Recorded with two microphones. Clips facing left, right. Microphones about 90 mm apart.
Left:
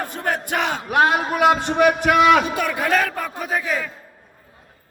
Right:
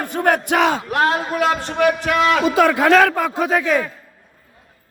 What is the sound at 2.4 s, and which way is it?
A man's voice, 90° right.